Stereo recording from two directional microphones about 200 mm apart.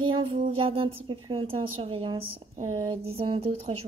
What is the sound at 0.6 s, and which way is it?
A woman's voice, 25° right (ahead or behind).